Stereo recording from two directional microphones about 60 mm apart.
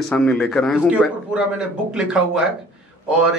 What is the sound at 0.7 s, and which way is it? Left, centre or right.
Speech, centre.